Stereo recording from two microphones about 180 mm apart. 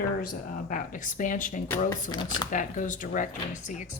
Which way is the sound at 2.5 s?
45° left (ahead or behind).